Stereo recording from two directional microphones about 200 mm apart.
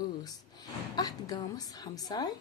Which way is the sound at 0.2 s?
20° left (ahead or behind).